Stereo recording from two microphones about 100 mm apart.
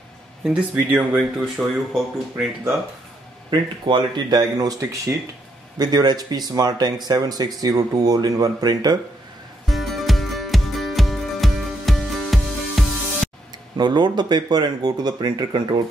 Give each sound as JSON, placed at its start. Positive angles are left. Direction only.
{"t": 0.5, "sound": "speech", "side_deg": -15}
{"t": 3.4, "sound": "speech", "side_deg": -50}
{"t": 9.7, "sound": "music", "side_deg": 0}
{"t": 13.7, "sound": "speech", "side_deg": -50}